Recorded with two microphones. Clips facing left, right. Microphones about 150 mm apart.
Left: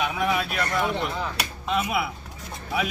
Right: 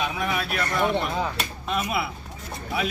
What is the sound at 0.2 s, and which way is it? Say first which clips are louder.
Speech: left 2 dB; 15° left (ahead or behind).